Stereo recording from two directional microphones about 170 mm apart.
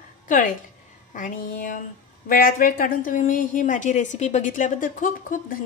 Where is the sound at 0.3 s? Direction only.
50° left (ahead or behind).